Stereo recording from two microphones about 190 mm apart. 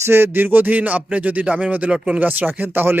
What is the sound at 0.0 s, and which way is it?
A man's voice, 10° right (ahead or behind).